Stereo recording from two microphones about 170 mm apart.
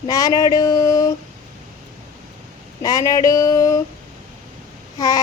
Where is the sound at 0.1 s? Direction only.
20° left (ahead or behind).